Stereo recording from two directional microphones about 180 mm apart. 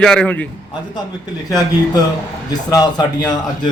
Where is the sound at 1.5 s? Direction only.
20° left (ahead or behind).